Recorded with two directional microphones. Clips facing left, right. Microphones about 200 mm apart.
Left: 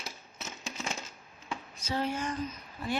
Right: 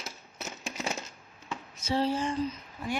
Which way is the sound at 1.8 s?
30° right (ahead or behind).